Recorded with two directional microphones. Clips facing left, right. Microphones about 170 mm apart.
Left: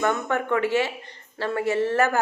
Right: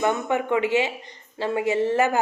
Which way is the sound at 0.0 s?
15° right (ahead or behind).